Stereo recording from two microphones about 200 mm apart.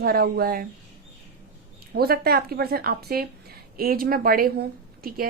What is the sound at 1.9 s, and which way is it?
A woman's voice, 50° right (ahead or behind).